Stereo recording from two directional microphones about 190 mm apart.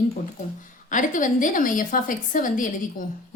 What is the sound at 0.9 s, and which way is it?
A woman's voice, 45° left (ahead or behind).